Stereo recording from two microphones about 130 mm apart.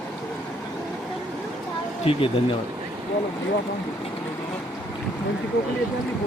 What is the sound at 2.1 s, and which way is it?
Speech, 45° left (ahead or behind).